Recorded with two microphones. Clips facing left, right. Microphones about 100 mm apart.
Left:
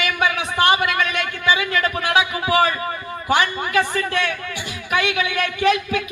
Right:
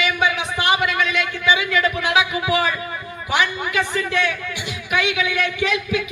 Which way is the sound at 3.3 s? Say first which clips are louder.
Left 2 dB; 45° left (ahead or behind).